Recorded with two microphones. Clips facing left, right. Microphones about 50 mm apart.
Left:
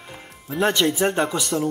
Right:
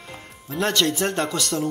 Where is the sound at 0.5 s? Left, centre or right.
Centre.